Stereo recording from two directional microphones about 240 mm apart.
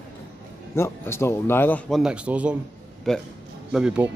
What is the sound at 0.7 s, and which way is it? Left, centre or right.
A man's voice, centre.